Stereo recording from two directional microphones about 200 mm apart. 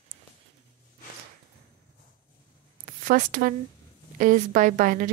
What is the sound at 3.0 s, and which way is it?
A woman's voice, 40° right (ahead or behind).